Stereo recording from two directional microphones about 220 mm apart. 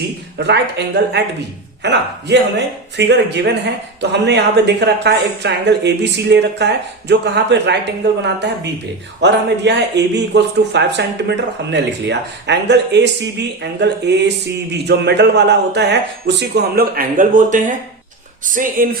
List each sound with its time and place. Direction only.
0.3 s speech: 50° right (ahead or behind)